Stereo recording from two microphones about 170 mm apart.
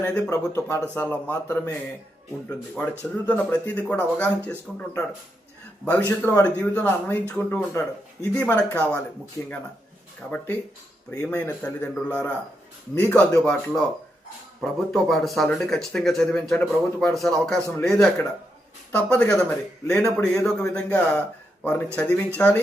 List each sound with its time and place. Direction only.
0.0 s speech: 10° left (ahead or behind)
3.0 s speech: 10° left (ahead or behind)
10.3 s speech: 10° left (ahead or behind)